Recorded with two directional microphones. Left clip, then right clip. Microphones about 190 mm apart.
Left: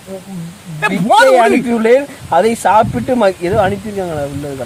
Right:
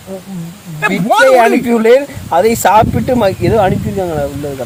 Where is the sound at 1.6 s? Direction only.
45° right (ahead or behind).